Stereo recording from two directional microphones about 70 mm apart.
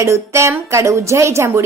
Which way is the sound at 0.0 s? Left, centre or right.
Right.